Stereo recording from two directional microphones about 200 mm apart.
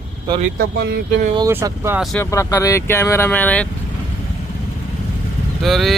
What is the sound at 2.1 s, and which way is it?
Speech, 15° left (ahead or behind).